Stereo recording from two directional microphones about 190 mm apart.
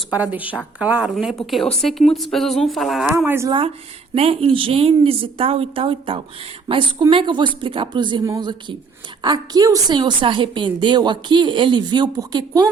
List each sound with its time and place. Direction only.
0.1 s a woman's voice: 10° right (ahead or behind)
4.1 s a woman's voice: 30° right (ahead or behind)